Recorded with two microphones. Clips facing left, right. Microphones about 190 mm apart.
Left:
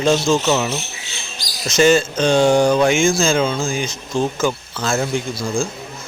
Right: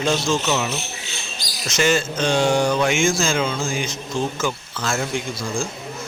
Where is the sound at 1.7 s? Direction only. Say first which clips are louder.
Left 6 dB; 30° left (ahead or behind).